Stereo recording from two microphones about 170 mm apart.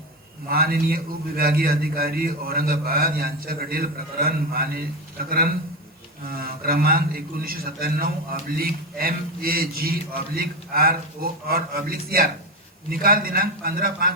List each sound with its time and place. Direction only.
0.4 s a man's voice: 60° right (ahead or behind)
6.2 s a man's voice: 60° right (ahead or behind)